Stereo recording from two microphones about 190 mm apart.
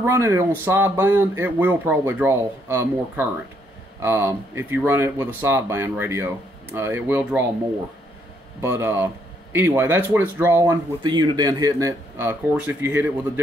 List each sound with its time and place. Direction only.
0.0 s speech: 15° right (ahead or behind)
8.5 s speech: 15° right (ahead or behind)
10.6 s speech: 25° right (ahead or behind)